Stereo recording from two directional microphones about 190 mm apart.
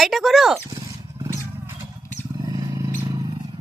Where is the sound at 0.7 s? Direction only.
20° right (ahead or behind).